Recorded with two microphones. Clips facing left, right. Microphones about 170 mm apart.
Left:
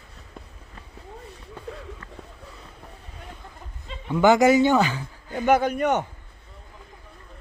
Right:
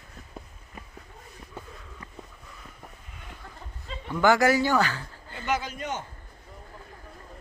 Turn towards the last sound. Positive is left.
turn(degrees=65)  # may be behind; listen again after turning